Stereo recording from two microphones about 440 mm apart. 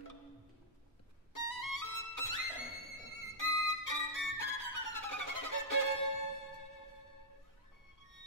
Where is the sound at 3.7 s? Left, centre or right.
Left.